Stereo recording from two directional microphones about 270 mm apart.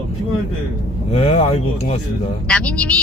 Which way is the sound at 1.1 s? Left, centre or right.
Left.